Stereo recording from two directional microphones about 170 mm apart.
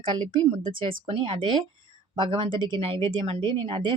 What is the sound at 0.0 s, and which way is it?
Speech, 30° right (ahead or behind).